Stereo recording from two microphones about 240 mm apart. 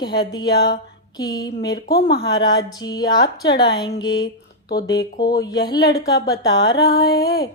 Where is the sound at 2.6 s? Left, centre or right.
Centre.